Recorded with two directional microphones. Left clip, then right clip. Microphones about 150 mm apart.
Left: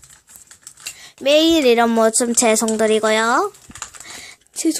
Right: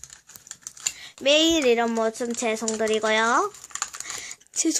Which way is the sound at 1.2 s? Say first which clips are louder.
Left 6 dB; 15° left (ahead or behind).